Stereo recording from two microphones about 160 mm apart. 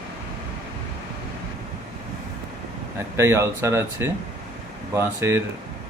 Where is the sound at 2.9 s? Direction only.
15° right (ahead or behind).